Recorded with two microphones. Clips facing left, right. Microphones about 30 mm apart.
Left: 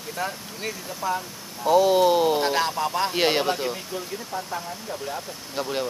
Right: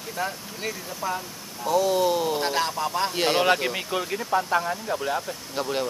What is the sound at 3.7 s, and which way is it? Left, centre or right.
Speech, right.